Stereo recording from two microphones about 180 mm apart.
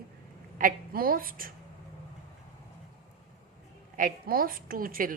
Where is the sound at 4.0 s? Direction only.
50° right (ahead or behind).